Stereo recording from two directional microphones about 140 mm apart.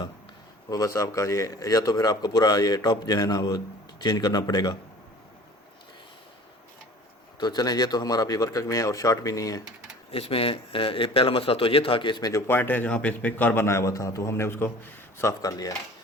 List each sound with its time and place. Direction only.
0.7 s a man's voice: 25° left (ahead or behind)
7.3 s a man's voice: 30° left (ahead or behind)
10.1 s a man's voice: 45° left (ahead or behind)
12.3 s a man's voice: 15° left (ahead or behind)